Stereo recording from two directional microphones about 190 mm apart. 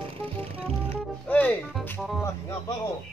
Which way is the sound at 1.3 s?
10° left (ahead or behind).